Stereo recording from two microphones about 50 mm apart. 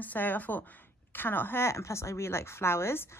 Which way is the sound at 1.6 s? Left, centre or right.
Left.